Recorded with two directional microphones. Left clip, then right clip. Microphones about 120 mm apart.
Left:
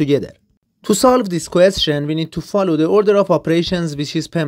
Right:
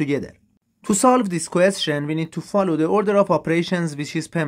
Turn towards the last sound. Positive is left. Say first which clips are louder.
# left 4 dB
turn(degrees=25)  # may be behind; listen again after turning